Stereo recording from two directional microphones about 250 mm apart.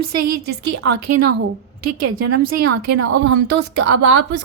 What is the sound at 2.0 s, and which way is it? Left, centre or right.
Speech, right.